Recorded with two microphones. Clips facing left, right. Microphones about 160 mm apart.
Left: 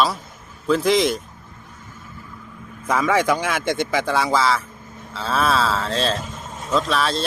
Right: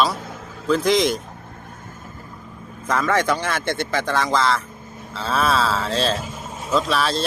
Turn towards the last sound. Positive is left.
turn(degrees=0)  # may be behind; listen again after turning